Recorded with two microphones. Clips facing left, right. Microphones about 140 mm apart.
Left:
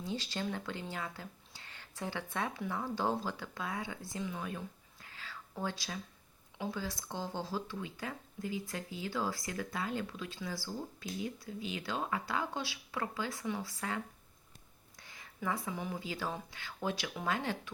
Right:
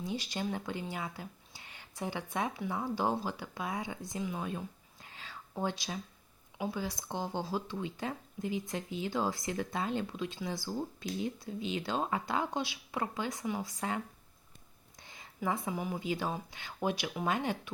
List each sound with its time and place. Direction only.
0.0 s speech: 15° right (ahead or behind)